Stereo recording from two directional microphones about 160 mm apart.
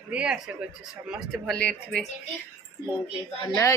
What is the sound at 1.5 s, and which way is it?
Speech, 5° left (ahead or behind).